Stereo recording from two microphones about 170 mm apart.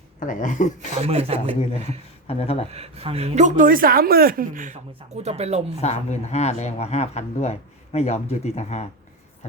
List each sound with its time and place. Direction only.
0.2 s speech: 50° left (ahead or behind)
0.9 s speech: 40° right (ahead or behind)
2.2 s speech: 35° left (ahead or behind)
2.6 s speech: 35° right (ahead or behind)
5.8 s speech: 40° left (ahead or behind)